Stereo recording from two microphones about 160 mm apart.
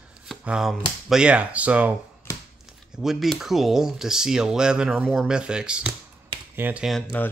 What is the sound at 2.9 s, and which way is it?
Speech, centre (ahead or behind).